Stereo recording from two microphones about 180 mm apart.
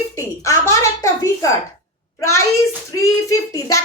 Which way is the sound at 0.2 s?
15° left (ahead or behind).